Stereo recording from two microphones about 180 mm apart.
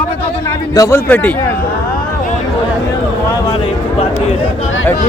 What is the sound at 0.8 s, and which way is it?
Speech, 15° left (ahead or behind).